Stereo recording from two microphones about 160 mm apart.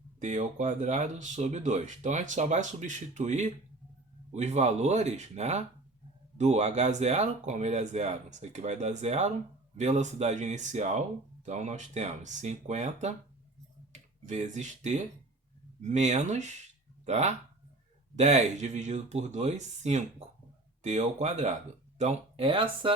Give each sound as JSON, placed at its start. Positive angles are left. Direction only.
{"t": 0.2, "sound": "speech", "side_deg": -50}